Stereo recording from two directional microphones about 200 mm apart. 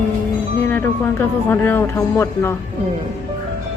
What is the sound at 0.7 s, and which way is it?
Speech, 10° left (ahead or behind).